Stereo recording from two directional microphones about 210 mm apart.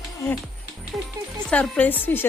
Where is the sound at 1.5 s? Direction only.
5° left (ahead or behind).